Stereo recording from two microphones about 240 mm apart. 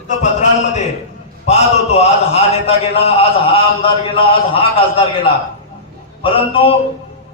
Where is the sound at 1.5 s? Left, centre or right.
Left.